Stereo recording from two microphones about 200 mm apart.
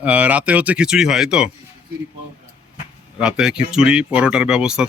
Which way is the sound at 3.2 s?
5° right (ahead or behind).